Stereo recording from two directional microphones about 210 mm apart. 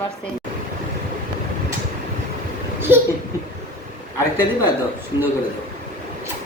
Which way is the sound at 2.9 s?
10° right (ahead or behind).